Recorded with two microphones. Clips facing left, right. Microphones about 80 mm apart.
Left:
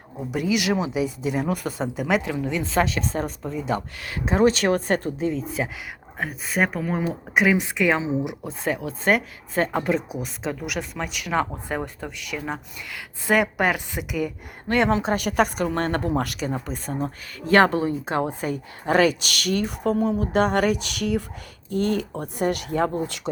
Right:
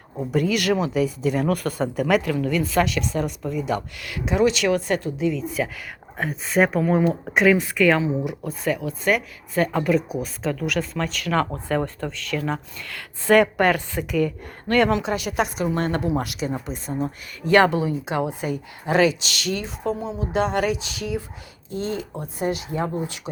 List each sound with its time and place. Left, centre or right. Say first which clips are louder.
0.3 s speech: right 2 dB; centre; by 5.6 s left
6.1 s speech: right 4 dB; centre
7.3 s speech: right 2 dB; centre
8.6 s speech: even; left
14.9 s a woman's voice: left 2 dB; left
17.4 s a woman's voice: right 1 dB; left